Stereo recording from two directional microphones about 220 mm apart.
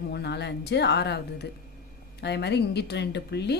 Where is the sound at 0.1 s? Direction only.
50° left (ahead or behind).